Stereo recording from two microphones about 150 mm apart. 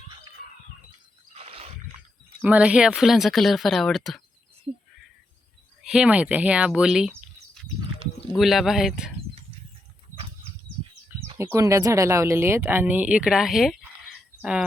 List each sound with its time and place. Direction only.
1.3 s a sound: 40° right (ahead or behind)
2.4 s speech: 10° right (ahead or behind)
5.8 s speech: 5° right (ahead or behind)
8.4 s speech: centre (ahead or behind)
11.5 s speech: 20° right (ahead or behind); by 13.7 s centre (ahead or behind)